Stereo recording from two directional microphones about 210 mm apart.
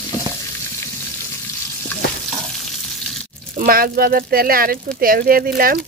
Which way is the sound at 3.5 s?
45° right (ahead or behind).